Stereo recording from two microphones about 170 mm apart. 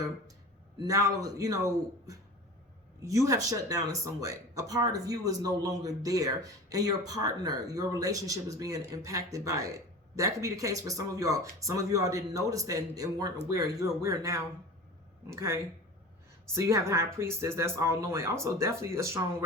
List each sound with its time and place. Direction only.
0.9 s speech: 20° right (ahead or behind)